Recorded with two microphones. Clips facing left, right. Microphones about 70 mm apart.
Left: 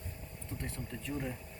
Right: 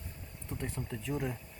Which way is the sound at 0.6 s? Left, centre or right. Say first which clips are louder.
Right 4 dB; centre.